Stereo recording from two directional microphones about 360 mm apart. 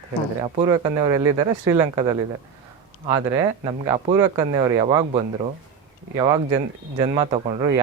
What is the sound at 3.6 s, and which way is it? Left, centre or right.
Speech, centre.